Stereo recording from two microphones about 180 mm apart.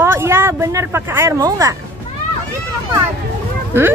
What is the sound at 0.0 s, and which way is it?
Speech, 15° right (ahead or behind).